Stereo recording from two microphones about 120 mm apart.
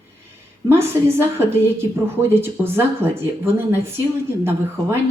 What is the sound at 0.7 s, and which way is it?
Speech, 20° right (ahead or behind).